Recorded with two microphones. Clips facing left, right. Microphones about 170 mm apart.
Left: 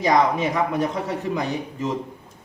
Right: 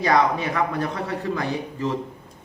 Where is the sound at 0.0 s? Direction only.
15° left (ahead or behind).